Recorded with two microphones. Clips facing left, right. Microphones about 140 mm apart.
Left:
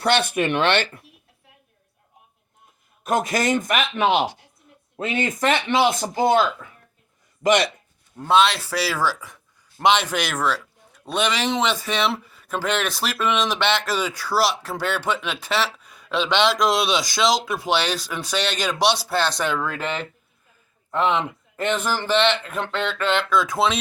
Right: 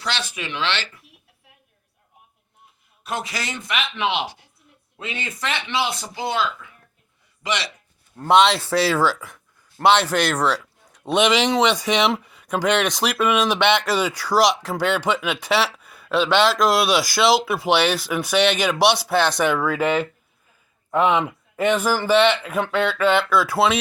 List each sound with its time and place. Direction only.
0.0 s speech: 55° left (ahead or behind)
3.0 s speech: 45° left (ahead or behind)
8.1 s speech: 15° left (ahead or behind)
11.1 s speech: 25° right (ahead or behind)
11.5 s speech: 15° right (ahead or behind)